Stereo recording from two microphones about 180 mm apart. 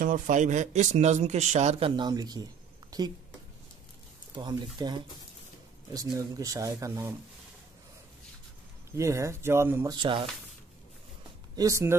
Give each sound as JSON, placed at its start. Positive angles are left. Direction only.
{"t": 0.0, "sound": "speech", "side_deg": -45}
{"t": 4.4, "sound": "speech", "side_deg": -25}
{"t": 8.9, "sound": "speech", "side_deg": -15}
{"t": 9.9, "sound": "speech", "side_deg": -25}
{"t": 11.5, "sound": "speech", "side_deg": -15}